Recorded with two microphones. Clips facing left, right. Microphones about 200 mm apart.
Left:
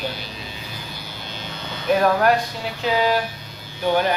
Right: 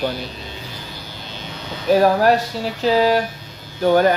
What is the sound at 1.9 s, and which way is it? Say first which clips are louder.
Speech: right 3 dB; 35° right (ahead or behind).